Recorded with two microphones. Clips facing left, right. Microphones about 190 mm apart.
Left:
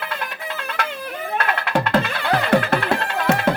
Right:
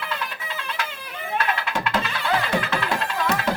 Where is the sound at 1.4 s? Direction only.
60° left (ahead or behind).